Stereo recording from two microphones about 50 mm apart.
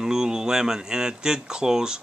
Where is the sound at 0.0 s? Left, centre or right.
Centre.